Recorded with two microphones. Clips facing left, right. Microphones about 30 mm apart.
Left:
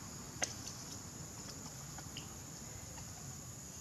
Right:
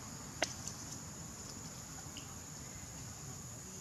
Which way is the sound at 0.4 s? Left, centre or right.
Right.